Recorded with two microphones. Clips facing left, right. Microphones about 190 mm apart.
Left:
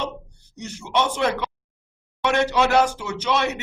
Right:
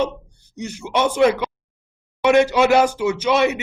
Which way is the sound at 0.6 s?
15° right (ahead or behind).